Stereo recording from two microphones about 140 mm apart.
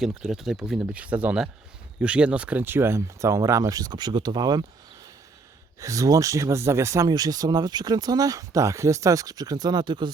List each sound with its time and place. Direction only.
0.0 s speech: 5° right (ahead or behind); by 4.6 s 30° right (ahead or behind)
5.8 s speech: 25° right (ahead or behind)